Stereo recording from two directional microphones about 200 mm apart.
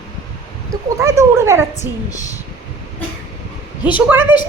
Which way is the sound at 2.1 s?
15° left (ahead or behind).